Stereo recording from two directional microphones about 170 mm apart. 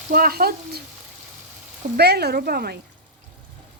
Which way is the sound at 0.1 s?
60° right (ahead or behind).